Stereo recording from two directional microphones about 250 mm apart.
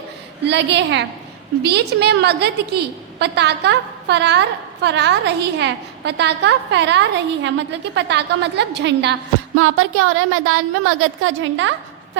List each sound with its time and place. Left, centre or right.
0.4 s a woman's voice: right
9.6 s a woman's voice: right